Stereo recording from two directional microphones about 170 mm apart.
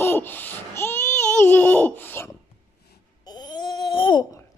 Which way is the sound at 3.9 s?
25° left (ahead or behind).